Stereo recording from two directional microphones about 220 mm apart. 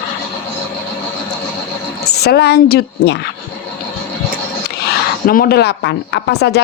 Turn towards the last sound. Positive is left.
turn(degrees=50)  # may be behind; listen again after turning